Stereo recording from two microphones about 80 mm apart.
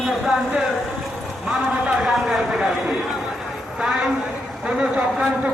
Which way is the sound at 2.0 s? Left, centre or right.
Centre.